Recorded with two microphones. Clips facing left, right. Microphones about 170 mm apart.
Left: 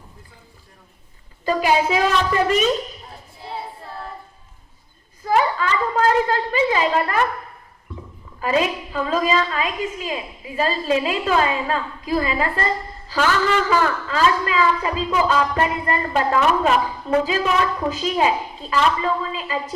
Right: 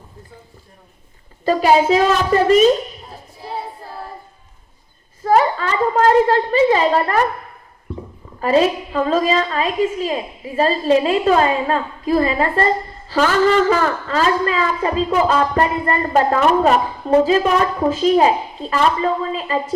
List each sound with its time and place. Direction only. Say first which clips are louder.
1.5 s a woman's voice: right 5 dB; 40° right (ahead or behind)
5.2 s a woman's voice: right 4 dB; 40° right (ahead or behind)
8.4 s a woman's voice: right 5 dB; 35° right (ahead or behind)